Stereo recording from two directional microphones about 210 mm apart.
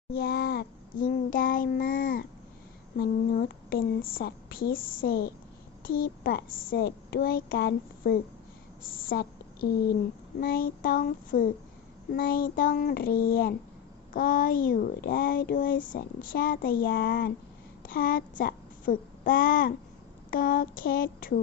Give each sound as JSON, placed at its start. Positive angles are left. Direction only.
{"t": 0.1, "sound": "a child's voice", "side_deg": 50}
{"t": 10.4, "sound": "a child's voice", "side_deg": 45}
{"t": 20.3, "sound": "a sound", "side_deg": 40}